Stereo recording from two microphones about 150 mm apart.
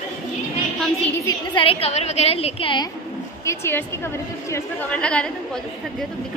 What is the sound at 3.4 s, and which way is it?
A woman's voice, 15° left (ahead or behind).